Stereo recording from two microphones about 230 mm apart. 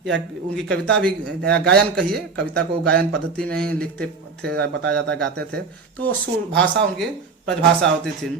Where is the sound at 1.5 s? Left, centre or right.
Right.